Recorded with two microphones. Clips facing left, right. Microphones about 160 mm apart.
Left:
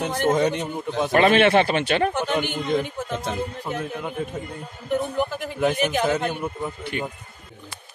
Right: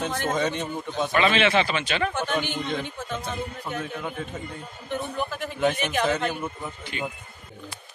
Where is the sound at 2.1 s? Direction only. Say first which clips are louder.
Left 3 dB; 15° left (ahead or behind).